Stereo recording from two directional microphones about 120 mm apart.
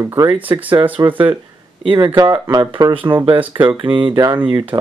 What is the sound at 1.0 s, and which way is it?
Speech, 45° right (ahead or behind).